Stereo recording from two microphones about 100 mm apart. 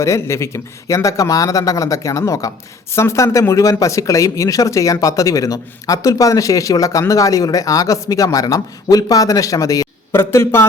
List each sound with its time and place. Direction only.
0.0 s speech: 30° left (ahead or behind)
10.1 s speech: 25° left (ahead or behind)